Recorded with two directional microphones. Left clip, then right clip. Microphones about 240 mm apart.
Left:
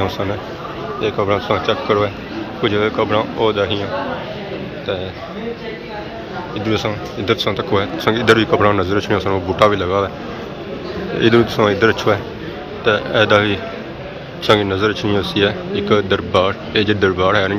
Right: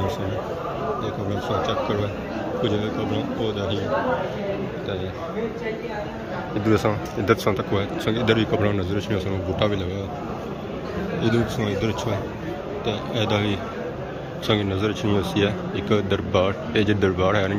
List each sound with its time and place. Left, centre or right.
1.0 s speech: centre
6.6 s speech: right
7.4 s a man's voice: centre
11.2 s a man's voice: centre